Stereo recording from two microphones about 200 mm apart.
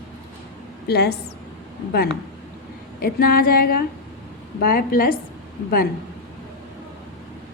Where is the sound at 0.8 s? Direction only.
55° left (ahead or behind).